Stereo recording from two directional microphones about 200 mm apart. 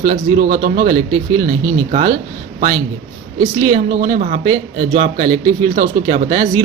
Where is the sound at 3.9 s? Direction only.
45° right (ahead or behind).